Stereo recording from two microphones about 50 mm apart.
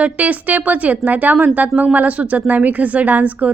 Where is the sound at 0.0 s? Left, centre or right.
Right.